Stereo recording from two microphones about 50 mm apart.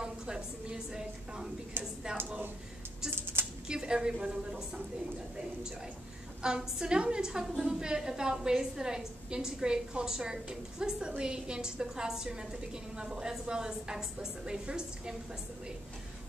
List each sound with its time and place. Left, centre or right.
0.0 s a woman's voice: centre
3.6 s a woman's voice: centre
6.4 s a woman's voice: centre